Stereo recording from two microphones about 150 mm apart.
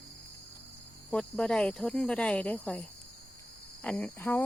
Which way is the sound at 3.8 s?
10° left (ahead or behind).